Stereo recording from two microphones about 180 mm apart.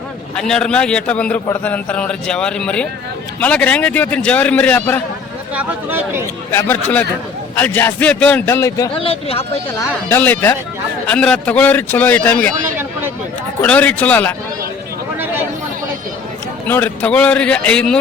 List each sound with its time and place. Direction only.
0.3 s a man's voice: 5° left (ahead or behind)
5.5 s speech: 10° right (ahead or behind)
6.5 s a man's voice: 15° left (ahead or behind)
9.0 s speech: 30° left (ahead or behind)
10.1 s a man's voice: 10° left (ahead or behind)
13.6 s a man's voice: 10° left (ahead or behind)
16.6 s a man's voice: 10° left (ahead or behind)